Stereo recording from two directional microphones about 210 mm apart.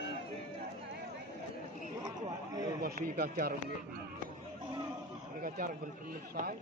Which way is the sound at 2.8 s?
45° right (ahead or behind).